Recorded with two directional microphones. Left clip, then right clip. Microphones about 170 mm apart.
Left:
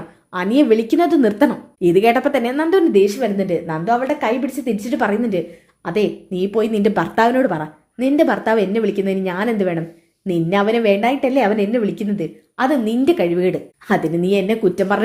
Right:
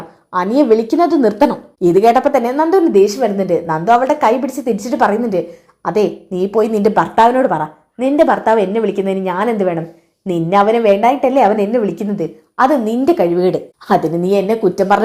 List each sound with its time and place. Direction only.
0.3 s a woman's voice: 10° left (ahead or behind)
1.4 s a woman's voice: centre (ahead or behind)
7.0 s a woman's voice: 20° left (ahead or behind)
13.4 s a woman's voice: 5° right (ahead or behind)